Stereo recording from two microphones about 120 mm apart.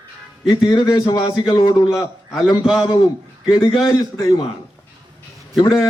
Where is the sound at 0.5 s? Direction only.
35° left (ahead or behind).